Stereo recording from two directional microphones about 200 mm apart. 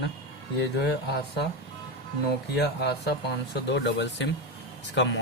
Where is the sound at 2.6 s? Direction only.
55° left (ahead or behind).